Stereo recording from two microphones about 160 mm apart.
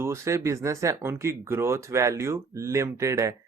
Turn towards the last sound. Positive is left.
turn(degrees=-20)  # may be behind; listen again after turning